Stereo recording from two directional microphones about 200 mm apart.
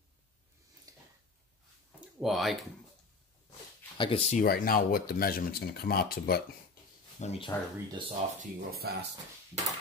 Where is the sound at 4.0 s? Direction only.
25° left (ahead or behind).